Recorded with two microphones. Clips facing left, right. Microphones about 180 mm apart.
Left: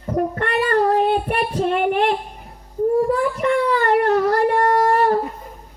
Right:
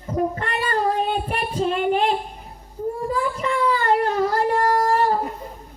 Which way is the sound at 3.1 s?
65° left (ahead or behind).